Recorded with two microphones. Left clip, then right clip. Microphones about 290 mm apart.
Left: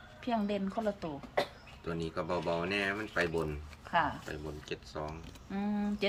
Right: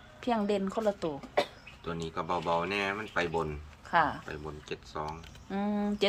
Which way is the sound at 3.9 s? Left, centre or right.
Right.